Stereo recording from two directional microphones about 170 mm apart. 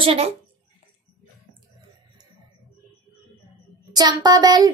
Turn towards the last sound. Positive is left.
turn(degrees=-25)  # may be behind; listen again after turning